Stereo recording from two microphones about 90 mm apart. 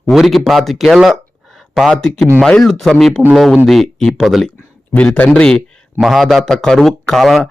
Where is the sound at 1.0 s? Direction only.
Centre (ahead or behind).